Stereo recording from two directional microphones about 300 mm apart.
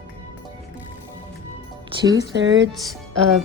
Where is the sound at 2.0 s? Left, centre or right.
Centre.